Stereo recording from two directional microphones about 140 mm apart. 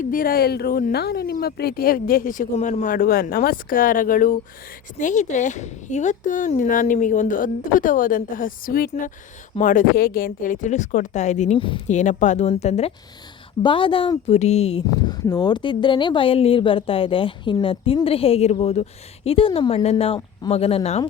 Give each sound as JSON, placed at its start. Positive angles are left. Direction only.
{"t": 0.0, "sound": "speech", "side_deg": 85}
{"t": 2.6, "sound": "speech", "side_deg": 60}
{"t": 4.9, "sound": "speech", "side_deg": 60}
{"t": 11.5, "sound": "speech", "side_deg": 40}
{"t": 11.9, "sound": "speech", "side_deg": 60}
{"t": 13.6, "sound": "speech", "side_deg": 35}
{"t": 14.8, "sound": "speech", "side_deg": 30}